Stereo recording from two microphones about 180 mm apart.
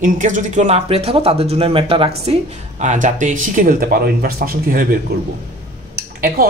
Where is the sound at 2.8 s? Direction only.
45° right (ahead or behind).